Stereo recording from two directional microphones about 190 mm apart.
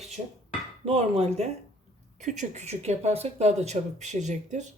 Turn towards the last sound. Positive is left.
turn(degrees=-40)  # may be behind; listen again after turning